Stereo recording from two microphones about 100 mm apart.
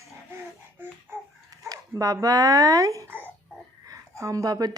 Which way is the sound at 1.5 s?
35° right (ahead or behind).